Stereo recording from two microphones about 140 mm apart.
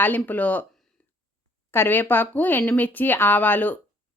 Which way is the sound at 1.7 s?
15° left (ahead or behind).